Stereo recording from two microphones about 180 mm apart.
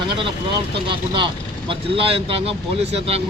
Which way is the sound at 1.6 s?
30° right (ahead or behind).